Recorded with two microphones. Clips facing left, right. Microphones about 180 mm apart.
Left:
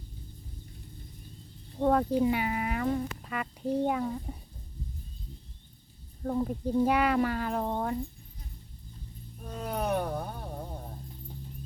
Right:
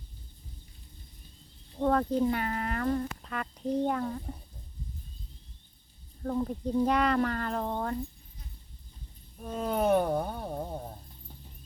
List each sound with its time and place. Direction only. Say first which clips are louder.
1.8 s speech: left 1 dB; 10° left (ahead or behind)
6.2 s speech: left 1 dB; 10° left (ahead or behind)
9.5 s a sound: right 5 dB; 30° right (ahead or behind)